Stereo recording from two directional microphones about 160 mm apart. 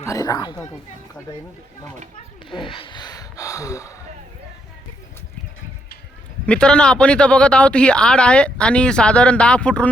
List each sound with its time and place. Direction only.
0.0 s speech: 20° left (ahead or behind)
2.5 s speech: 30° left (ahead or behind)
6.4 s speech: 5° left (ahead or behind)